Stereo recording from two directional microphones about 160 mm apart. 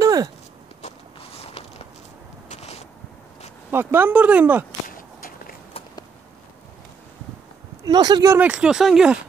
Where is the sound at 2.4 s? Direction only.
45° left (ahead or behind).